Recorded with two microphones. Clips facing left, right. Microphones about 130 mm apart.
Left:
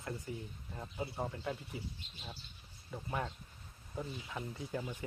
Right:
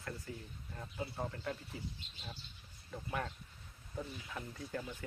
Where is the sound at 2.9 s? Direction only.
15° left (ahead or behind).